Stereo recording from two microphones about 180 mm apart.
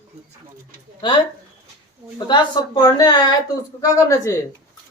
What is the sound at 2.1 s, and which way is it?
A woman's voice, 25° left (ahead or behind).